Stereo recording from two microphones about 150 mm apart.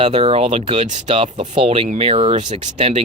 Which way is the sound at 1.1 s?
35° right (ahead or behind).